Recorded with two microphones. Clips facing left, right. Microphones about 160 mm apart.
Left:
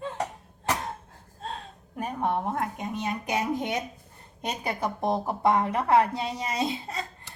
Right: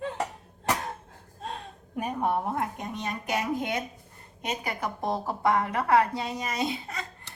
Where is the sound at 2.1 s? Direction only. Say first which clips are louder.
Left 1 dB; 5° right (ahead or behind).